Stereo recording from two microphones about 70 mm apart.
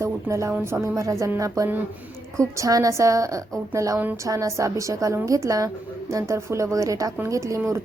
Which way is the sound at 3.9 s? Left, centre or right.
Right.